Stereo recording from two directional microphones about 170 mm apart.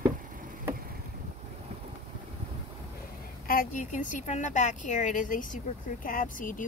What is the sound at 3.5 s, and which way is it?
A woman's voice, 50° left (ahead or behind).